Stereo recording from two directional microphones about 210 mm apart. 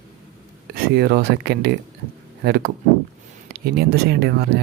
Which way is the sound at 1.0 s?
50° right (ahead or behind).